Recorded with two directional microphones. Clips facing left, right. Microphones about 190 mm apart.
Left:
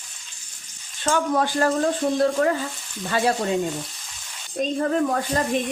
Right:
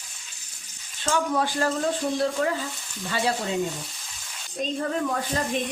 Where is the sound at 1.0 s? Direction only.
50° left (ahead or behind).